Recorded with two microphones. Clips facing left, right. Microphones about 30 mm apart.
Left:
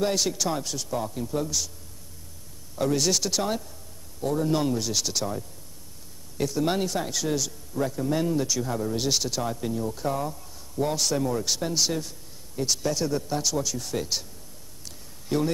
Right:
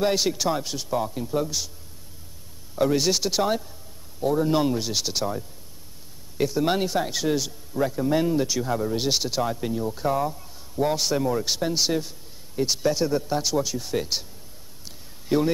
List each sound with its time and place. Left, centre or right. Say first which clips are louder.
0.0 s a man's voice: right 3 dB; centre
2.7 s a man's voice: right 3 dB; centre
15.2 s speech: right 4 dB; centre